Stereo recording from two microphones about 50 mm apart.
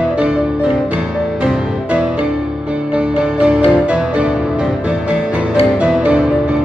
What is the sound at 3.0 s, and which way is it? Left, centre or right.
Music, right.